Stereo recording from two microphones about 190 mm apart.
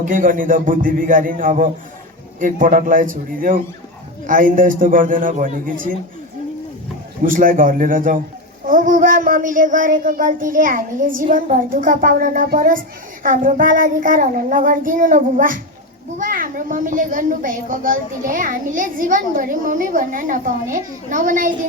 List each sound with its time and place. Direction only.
0.0 s a child's voice: 45° right (ahead or behind)
7.3 s a child's voice: 45° right (ahead or behind)